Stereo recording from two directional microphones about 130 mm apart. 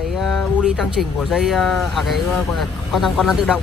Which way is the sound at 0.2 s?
5° right (ahead or behind).